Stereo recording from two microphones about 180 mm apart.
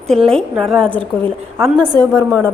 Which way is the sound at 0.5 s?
Centre (ahead or behind).